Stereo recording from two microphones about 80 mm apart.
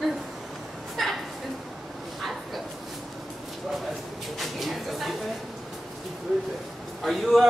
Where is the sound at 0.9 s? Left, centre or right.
Centre.